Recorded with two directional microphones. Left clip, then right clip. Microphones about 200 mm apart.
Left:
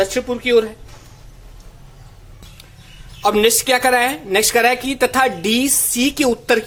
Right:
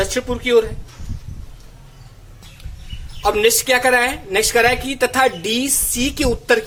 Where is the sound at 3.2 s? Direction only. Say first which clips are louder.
Left 1 dB; 25° left (ahead or behind).